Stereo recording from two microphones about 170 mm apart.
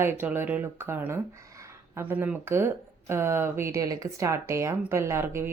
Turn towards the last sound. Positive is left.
turn(degrees=-15)  # may be behind; listen again after turning